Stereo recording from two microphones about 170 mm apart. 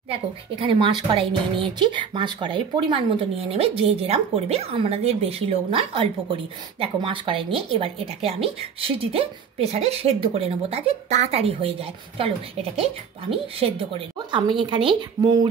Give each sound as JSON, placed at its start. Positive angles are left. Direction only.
{"t": 0.1, "sound": "speech", "side_deg": -30}